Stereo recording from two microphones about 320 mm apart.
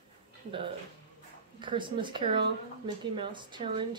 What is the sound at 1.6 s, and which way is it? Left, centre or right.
Speech, centre.